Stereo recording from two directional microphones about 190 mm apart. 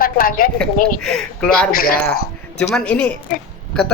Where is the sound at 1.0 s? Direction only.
5° left (ahead or behind).